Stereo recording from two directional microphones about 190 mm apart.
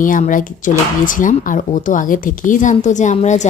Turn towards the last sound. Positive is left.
turn(degrees=40)  # may be behind; listen again after turning